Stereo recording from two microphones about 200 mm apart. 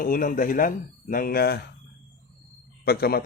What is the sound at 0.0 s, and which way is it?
A man's voice, 45° left (ahead or behind).